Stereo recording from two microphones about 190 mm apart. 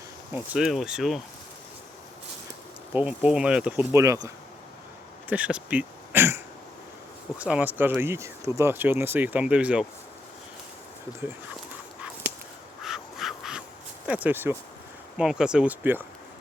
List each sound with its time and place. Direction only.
0.3 s speech: 5° right (ahead or behind)
2.9 s speech: 5° right (ahead or behind)
5.3 s speech: 5° right (ahead or behind)
12.8 s a sound: centre (ahead or behind)
14.1 s speech: 10° right (ahead or behind)